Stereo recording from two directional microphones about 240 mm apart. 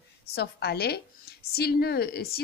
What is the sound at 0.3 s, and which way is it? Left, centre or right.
A woman's voice, left.